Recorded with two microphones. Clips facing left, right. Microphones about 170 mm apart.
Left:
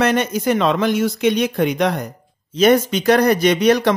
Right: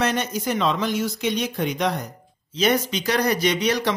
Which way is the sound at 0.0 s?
60° left (ahead or behind).